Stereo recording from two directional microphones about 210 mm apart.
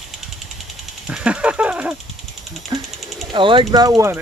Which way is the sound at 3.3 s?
25° right (ahead or behind).